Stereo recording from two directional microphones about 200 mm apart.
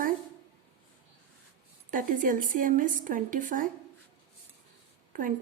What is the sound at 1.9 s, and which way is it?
Speech, 40° right (ahead or behind).